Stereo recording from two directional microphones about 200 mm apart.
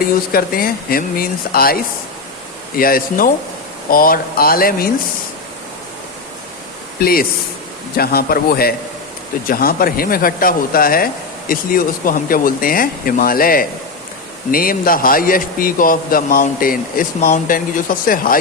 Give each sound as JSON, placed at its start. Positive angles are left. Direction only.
{"t": 0.0, "sound": "speech", "side_deg": 45}
{"t": 7.0, "sound": "speech", "side_deg": 50}